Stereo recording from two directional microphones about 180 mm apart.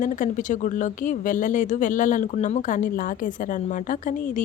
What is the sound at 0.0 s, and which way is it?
Speech, 45° left (ahead or behind).